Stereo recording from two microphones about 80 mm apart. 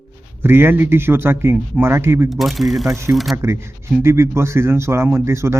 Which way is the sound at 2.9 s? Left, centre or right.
Right.